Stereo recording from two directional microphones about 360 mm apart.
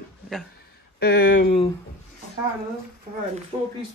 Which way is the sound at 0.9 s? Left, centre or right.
Left.